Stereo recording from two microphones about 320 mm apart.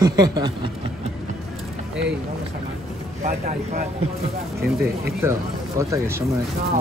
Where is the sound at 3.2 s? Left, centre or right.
Centre.